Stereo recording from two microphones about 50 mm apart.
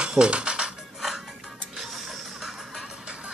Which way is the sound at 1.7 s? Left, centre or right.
Centre.